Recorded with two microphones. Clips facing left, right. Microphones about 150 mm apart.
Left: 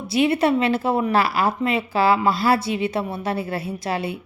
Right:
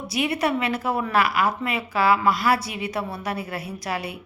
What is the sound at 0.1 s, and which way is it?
A woman's voice, 25° left (ahead or behind).